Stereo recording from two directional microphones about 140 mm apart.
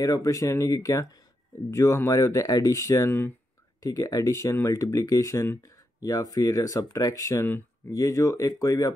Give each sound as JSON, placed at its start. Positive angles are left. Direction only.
{"t": 0.0, "sound": "speech", "side_deg": 25}